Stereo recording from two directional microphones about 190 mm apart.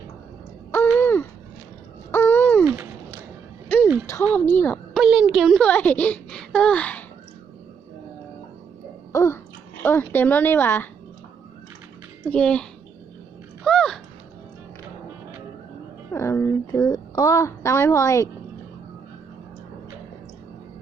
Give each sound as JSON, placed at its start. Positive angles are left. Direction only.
{"t": 0.9, "sound": "a sound", "side_deg": 10}
{"t": 2.6, "sound": "a sound", "side_deg": -10}
{"t": 4.4, "sound": "a woman's voice", "side_deg": 10}
{"t": 4.9, "sound": "a woman's voice", "side_deg": -5}
{"t": 9.1, "sound": "babbling", "side_deg": 15}
{"t": 9.8, "sound": "a woman's voice", "side_deg": 10}
{"t": 12.3, "sound": "a child's voice", "side_deg": 5}
{"t": 13.7, "sound": "a sound", "side_deg": 5}
{"t": 16.1, "sound": "a woman's voice", "side_deg": 15}